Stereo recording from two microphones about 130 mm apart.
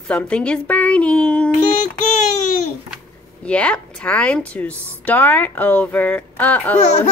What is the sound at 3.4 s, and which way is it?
A woman's voice, 10° left (ahead or behind).